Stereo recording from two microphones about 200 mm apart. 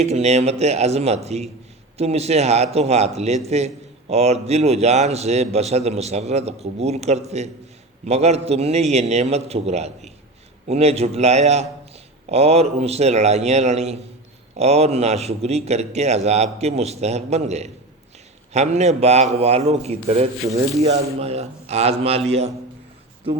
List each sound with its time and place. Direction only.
0.0 s a man's voice: 35° right (ahead or behind)